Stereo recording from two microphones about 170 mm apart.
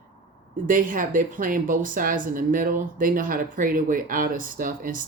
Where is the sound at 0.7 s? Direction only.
55° right (ahead or behind).